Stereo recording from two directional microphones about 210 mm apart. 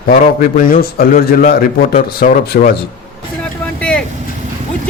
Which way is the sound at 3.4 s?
5° left (ahead or behind).